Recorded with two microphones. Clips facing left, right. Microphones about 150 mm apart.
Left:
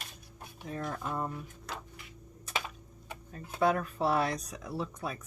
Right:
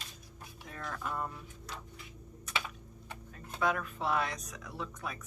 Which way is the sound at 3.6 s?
35° left (ahead or behind).